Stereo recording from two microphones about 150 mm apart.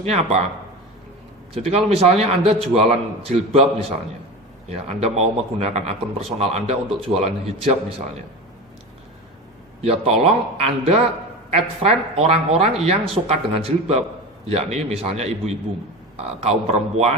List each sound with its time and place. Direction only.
0.0 s speech: 45° right (ahead or behind)
1.5 s a man's voice: 40° right (ahead or behind)
9.8 s a man's voice: 40° right (ahead or behind)